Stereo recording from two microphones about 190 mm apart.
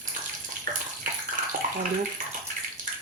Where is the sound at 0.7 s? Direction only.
45° right (ahead or behind).